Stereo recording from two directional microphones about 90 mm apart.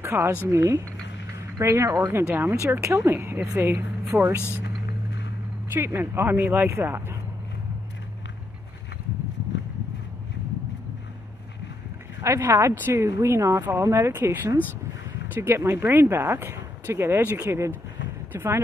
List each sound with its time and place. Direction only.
0.0 s speech: 25° right (ahead or behind)
2.2 s speech: 20° right (ahead or behind)
5.7 s speech: 25° right (ahead or behind)
12.2 s speech: 35° right (ahead or behind)